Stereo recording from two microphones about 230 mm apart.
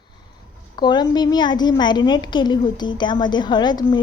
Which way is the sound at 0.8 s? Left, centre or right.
Centre.